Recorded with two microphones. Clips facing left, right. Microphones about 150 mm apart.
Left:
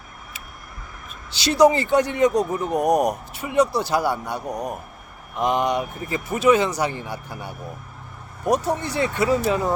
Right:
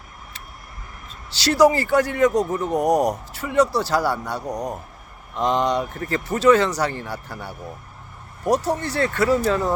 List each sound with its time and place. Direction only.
1.5 s speech: 15° left (ahead or behind)